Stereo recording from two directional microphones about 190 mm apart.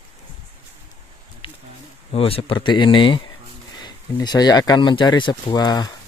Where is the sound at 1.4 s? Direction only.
30° left (ahead or behind).